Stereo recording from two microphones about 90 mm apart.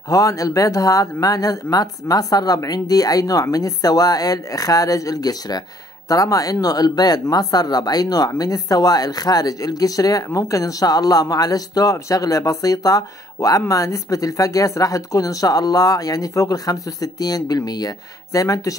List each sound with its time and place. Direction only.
0.1 s speech: 40° left (ahead or behind)